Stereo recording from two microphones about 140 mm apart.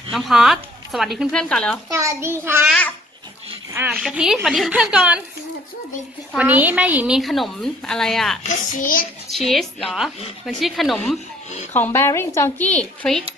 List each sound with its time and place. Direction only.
0.1 s speech: centre (ahead or behind)
1.9 s a woman's voice: 20° right (ahead or behind)
3.7 s a woman's voice: 10° right (ahead or behind)
6.3 s a woman's voice: 10° right (ahead or behind)
8.5 s a child's voice: 70° left (ahead or behind)
9.5 s speech: centre (ahead or behind)
11.7 s a woman's voice: 15° left (ahead or behind)